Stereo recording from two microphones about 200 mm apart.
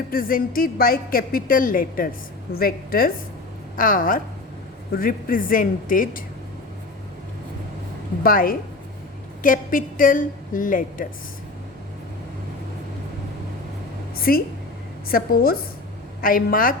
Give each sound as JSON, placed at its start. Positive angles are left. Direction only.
{"t": 0.1, "sound": "a woman's voice", "side_deg": 45}
{"t": 8.2, "sound": "a woman's voice", "side_deg": 45}
{"t": 14.2, "sound": "a woman's voice", "side_deg": 45}